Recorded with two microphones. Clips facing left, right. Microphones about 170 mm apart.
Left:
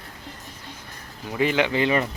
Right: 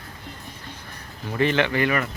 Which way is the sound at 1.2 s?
15° left (ahead or behind).